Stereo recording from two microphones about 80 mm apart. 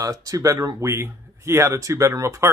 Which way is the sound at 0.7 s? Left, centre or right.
Right.